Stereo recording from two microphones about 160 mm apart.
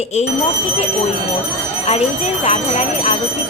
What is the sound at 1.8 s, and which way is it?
Speech, 40° left (ahead or behind).